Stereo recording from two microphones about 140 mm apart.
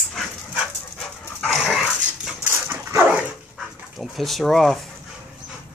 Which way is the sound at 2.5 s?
15° right (ahead or behind).